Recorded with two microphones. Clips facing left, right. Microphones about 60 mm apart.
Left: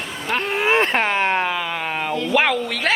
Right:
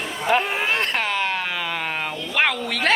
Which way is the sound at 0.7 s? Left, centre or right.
Left.